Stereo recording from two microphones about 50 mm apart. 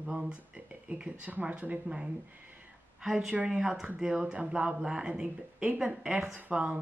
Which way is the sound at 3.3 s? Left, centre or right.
Right.